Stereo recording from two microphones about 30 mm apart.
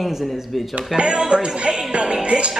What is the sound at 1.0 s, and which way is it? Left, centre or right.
Music, right.